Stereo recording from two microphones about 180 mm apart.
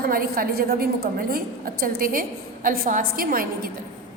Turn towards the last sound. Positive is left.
turn(degrees=-55)  # may be behind; listen again after turning